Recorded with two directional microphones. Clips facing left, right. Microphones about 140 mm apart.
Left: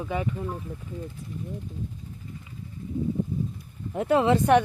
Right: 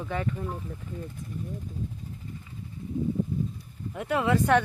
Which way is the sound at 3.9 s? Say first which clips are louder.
Left 4 dB; 30° left (ahead or behind).